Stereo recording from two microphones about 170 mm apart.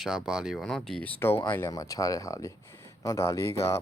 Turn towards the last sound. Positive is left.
turn(degrees=35)  # may be behind; listen again after turning